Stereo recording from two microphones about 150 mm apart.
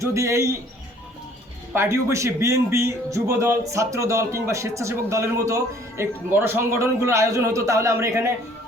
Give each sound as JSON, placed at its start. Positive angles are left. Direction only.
{"t": 0.0, "sound": "speech", "side_deg": -20}
{"t": 1.7, "sound": "speech", "side_deg": -15}